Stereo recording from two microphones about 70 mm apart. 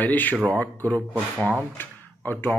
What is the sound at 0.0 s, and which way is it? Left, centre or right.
Speech, left.